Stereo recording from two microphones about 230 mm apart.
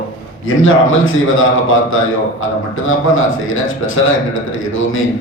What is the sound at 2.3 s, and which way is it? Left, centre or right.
A man's voice, left.